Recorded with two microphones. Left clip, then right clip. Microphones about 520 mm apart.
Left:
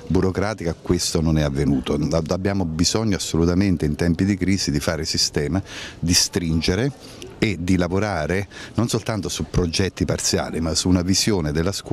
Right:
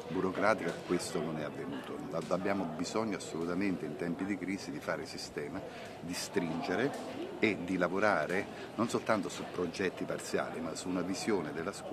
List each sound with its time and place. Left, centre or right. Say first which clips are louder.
0.2 s speech: left 4 dB; left